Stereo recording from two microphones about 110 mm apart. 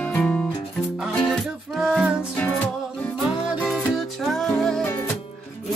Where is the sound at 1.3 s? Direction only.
5° right (ahead or behind).